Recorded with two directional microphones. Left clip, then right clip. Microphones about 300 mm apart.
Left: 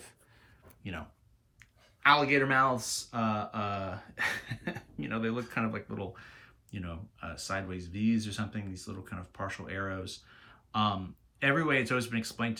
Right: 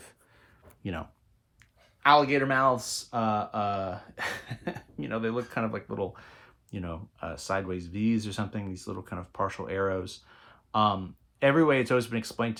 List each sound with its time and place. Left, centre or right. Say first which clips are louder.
2.0 s speech: right 3 dB; centre